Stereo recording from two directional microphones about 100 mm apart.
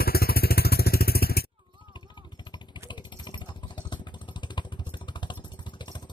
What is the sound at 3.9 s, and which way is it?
Vehicle, 50° left (ahead or behind).